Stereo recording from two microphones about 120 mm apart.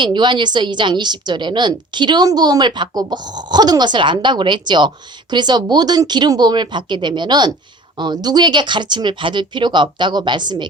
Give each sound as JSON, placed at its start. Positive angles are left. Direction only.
{"t": 0.0, "sound": "a woman's voice", "side_deg": -40}